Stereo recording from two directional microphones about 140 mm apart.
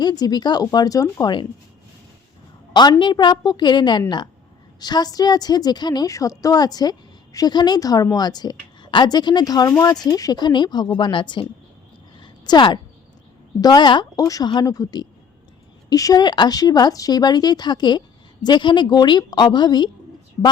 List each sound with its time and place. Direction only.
0.0 s a woman's voice: 30° left (ahead or behind)
2.7 s a woman's voice: 30° left (ahead or behind)
12.2 s a sound: 35° left (ahead or behind)
13.6 s a woman's voice: 30° left (ahead or behind)